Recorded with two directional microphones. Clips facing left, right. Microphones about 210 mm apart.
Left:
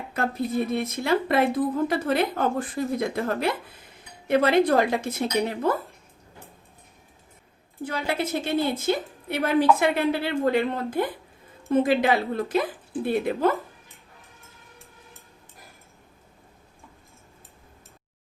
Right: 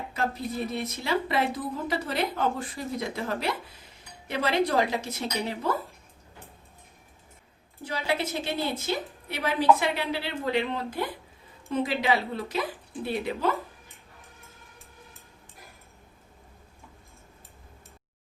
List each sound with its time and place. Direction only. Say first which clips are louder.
0.7 s a woman's voice: left 5 dB; 55° left (ahead or behind)
7.9 s a woman's voice: left 2 dB; 50° left (ahead or behind)